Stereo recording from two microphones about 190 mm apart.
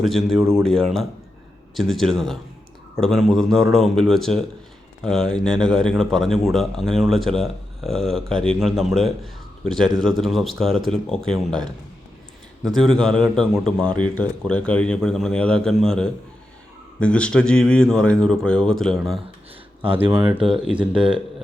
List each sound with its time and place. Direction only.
0.0 s speech: centre (ahead or behind)
19.8 s speech: 25° right (ahead or behind)
20.1 s speech: 10° right (ahead or behind)